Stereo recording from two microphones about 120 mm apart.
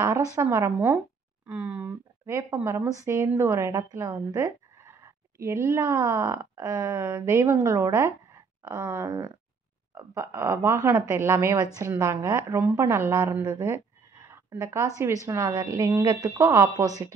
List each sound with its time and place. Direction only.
0.0 s a woman's voice: 25° right (ahead or behind)
1.5 s a woman's voice: 15° right (ahead or behind); by 17.1 s 30° right (ahead or behind)